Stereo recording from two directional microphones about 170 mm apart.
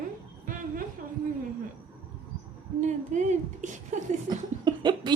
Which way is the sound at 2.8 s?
45° right (ahead or behind).